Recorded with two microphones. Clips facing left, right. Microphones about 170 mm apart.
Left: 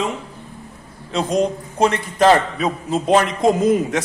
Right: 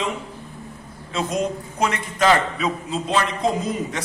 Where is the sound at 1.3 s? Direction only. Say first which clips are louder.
Left 7 dB; 30° left (ahead or behind).